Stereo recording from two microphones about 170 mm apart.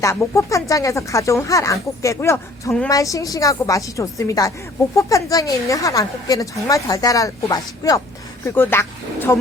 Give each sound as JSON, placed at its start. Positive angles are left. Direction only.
{"t": 0.0, "sound": "a woman's voice", "side_deg": 15}